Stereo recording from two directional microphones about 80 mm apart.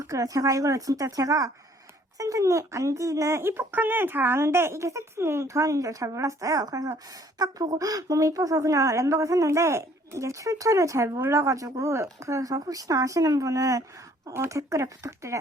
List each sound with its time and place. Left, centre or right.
0.0 s speech: right